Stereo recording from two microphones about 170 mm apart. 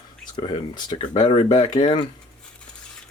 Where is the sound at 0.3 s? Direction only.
25° left (ahead or behind).